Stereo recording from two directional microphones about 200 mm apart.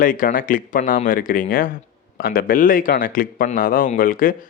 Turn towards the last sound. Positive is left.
turn(degrees=45)  # may be behind; listen again after turning